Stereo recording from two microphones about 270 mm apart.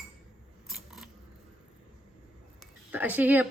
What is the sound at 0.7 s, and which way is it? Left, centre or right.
Scissors, centre.